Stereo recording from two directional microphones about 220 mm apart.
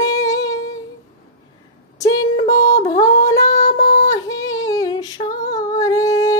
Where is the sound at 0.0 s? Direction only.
15° left (ahead or behind).